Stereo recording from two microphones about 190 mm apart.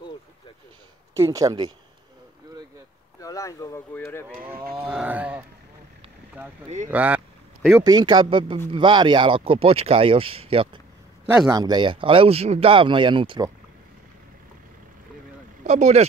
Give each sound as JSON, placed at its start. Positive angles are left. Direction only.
{"t": 1.1, "sound": "speech", "side_deg": -15}
{"t": 3.2, "sound": "speech", "side_deg": 15}
{"t": 4.3, "sound": "speech", "side_deg": -10}
{"t": 6.9, "sound": "speech", "side_deg": -10}
{"t": 7.8, "sound": "speech", "side_deg": -20}
{"t": 15.6, "sound": "speech", "side_deg": -40}